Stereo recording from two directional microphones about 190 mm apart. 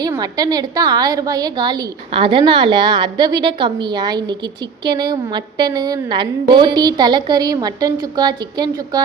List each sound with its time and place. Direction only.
0.2 s a woman's voice: 20° right (ahead or behind)